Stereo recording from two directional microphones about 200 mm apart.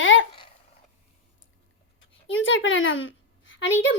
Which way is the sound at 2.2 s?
70° left (ahead or behind).